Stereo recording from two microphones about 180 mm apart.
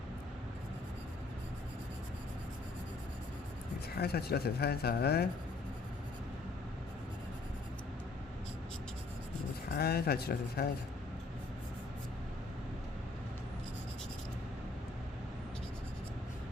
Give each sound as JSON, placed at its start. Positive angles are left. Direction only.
{"t": 3.9, "sound": "speech", "side_deg": 60}
{"t": 9.7, "sound": "speech", "side_deg": 60}